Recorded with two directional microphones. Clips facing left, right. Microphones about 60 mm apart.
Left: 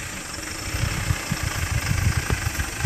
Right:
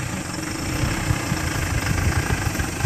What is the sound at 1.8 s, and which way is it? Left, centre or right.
Vehicle, right.